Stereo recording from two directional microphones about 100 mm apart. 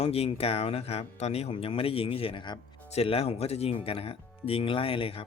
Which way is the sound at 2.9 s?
85° left.